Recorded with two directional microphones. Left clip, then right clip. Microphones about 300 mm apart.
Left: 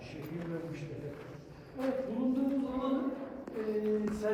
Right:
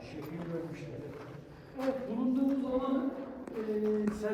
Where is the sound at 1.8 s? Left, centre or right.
Centre.